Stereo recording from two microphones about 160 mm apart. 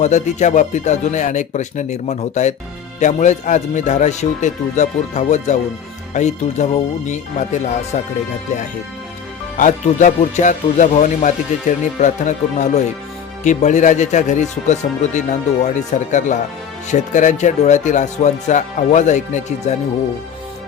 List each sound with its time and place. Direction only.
0.0 s speech: 45° left (ahead or behind)
9.6 s speech: 50° left (ahead or behind)